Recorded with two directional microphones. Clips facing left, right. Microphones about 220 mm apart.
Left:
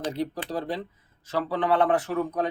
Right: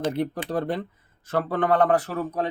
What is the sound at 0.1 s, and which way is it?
Speech, 60° right (ahead or behind).